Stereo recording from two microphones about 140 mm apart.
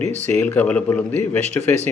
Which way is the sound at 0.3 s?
10° left (ahead or behind).